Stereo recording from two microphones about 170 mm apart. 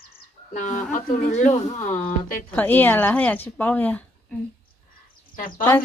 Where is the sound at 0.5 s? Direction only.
45° left (ahead or behind).